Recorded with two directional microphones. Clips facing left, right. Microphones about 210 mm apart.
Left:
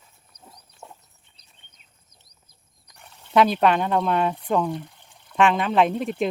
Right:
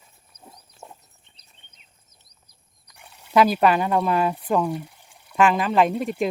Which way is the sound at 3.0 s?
5° right (ahead or behind).